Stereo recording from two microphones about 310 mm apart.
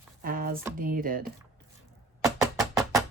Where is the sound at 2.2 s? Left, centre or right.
Centre.